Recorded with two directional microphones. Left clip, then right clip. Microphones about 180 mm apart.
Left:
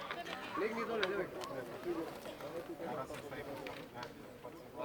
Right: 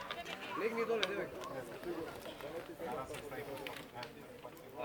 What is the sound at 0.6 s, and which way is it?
Speech, 55° right (ahead or behind).